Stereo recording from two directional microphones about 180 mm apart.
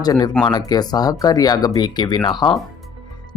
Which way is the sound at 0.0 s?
20° left (ahead or behind).